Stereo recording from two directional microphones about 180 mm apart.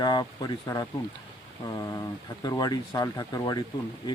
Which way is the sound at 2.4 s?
20° left (ahead or behind).